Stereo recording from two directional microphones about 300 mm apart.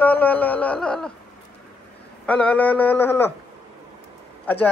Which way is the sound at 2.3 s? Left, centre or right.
Centre.